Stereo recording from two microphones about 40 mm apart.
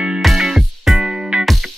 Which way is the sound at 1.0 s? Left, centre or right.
Centre.